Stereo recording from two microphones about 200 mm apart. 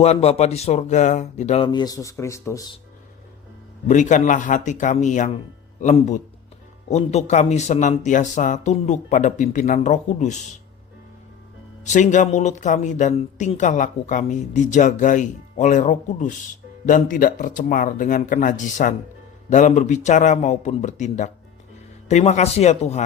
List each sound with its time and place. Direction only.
0.0 s speech: 30° left (ahead or behind); by 2.7 s 15° left (ahead or behind)
3.8 s speech: 40° left (ahead or behind)
11.9 s speech: 35° left (ahead or behind)